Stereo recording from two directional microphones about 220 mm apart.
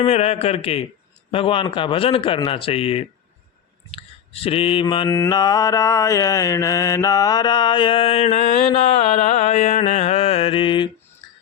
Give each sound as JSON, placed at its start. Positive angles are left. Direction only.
{"t": 0.0, "sound": "mantra", "side_deg": 30}